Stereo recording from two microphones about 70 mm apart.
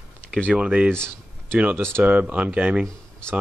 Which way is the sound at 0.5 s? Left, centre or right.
Centre.